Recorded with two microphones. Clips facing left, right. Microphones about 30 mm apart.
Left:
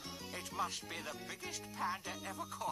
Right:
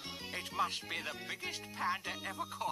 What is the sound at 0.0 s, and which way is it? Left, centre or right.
Speech, right.